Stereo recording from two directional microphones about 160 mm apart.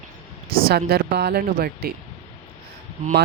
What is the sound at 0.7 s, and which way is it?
Speech, 90° right.